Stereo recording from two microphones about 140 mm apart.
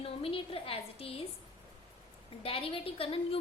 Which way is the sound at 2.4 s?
40° left (ahead or behind).